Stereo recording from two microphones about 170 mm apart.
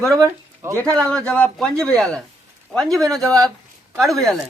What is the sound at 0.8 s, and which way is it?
Speech, 5° left (ahead or behind).